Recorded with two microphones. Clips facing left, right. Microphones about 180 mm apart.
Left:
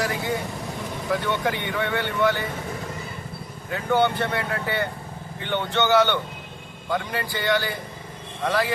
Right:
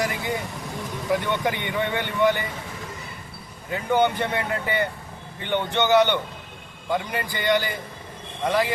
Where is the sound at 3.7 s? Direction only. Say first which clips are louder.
Even; 15° right (ahead or behind).